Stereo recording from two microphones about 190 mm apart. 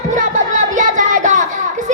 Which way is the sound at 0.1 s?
40° right (ahead or behind).